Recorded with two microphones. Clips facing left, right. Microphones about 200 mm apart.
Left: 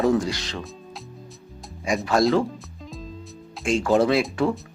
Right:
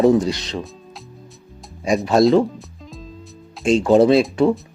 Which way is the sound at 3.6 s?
20° right (ahead or behind).